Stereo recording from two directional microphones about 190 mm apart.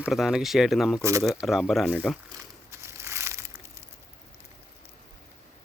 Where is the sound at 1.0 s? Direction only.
15° right (ahead or behind).